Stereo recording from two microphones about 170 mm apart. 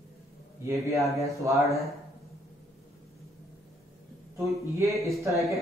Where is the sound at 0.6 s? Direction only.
20° right (ahead or behind).